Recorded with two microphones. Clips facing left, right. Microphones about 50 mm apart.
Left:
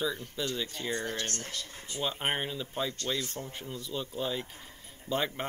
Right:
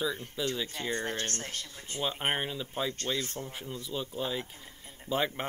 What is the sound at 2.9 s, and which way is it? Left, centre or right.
Speech, right.